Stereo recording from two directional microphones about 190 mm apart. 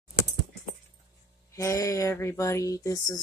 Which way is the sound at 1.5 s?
15° left (ahead or behind).